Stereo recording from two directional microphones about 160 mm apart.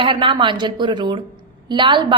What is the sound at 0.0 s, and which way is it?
A woman's voice, 35° right (ahead or behind).